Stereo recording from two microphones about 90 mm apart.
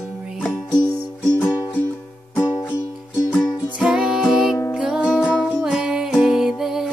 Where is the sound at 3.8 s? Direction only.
5° right (ahead or behind).